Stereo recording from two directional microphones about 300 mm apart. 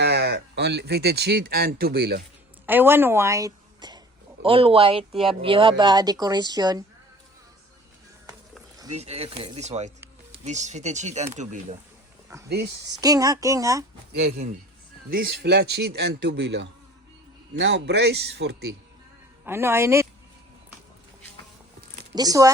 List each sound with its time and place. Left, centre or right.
0.0 s speech: right
2.6 s a woman's voice: centre
8.9 s speech: right
12.3 s speech: centre
14.1 s speech: right
19.5 s speech: centre
22.1 s speech: centre